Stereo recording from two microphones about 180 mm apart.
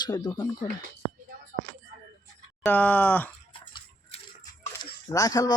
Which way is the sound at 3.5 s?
30° left (ahead or behind).